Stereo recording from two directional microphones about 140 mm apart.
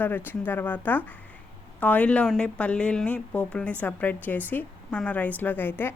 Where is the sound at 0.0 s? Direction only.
15° left (ahead or behind).